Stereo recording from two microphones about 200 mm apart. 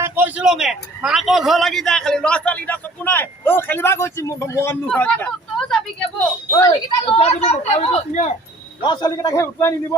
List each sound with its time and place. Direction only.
0.0 s a man's voice: 10° right (ahead or behind)
6.5 s a woman's voice: 15° left (ahead or behind)
7.1 s speech: 30° left (ahead or behind)
8.8 s a man's voice: 20° left (ahead or behind)